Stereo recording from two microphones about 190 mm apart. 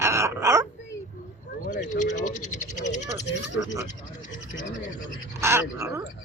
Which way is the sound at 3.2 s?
75° left (ahead or behind).